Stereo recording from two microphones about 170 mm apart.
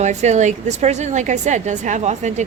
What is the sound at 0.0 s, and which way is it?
A woman's voice, 45° right (ahead or behind).